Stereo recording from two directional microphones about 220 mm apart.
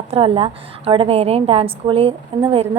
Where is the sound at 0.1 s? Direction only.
25° right (ahead or behind).